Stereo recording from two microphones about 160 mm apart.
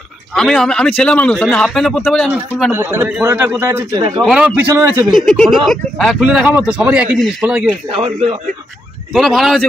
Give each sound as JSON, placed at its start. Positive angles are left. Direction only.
{"t": 0.3, "sound": "a man's voice", "side_deg": 5}
{"t": 2.7, "sound": "a man's voice", "side_deg": -15}
{"t": 4.0, "sound": "speech", "side_deg": -25}
{"t": 4.3, "sound": "a man's voice", "side_deg": -5}
{"t": 5.1, "sound": "a man's voice", "side_deg": 5}
{"t": 7.9, "sound": "speech", "side_deg": -35}
{"t": 9.1, "sound": "a man's voice", "side_deg": 0}